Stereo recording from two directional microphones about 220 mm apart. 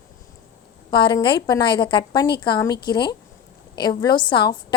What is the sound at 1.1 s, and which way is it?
A woman's voice, 20° left (ahead or behind).